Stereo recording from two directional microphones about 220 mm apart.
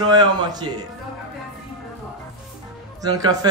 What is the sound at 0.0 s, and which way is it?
Speech, 20° right (ahead or behind).